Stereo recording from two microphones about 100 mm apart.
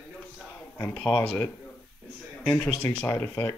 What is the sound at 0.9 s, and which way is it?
Speech, 10° left (ahead or behind).